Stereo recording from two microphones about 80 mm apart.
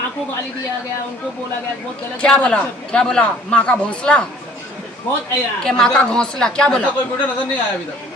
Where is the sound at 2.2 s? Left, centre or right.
Centre.